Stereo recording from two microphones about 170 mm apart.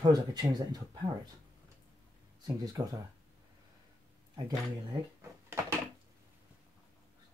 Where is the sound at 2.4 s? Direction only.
20° right (ahead or behind).